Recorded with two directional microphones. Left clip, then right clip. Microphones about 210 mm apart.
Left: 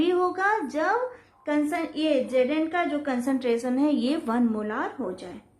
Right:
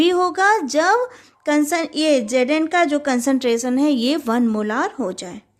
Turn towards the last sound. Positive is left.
turn(degrees=-50)  # may be behind; listen again after turning